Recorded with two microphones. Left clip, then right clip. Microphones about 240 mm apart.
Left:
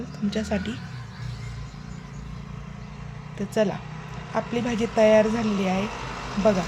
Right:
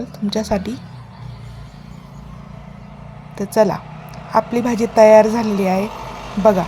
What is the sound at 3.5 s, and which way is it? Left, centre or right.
A woman's voice, right.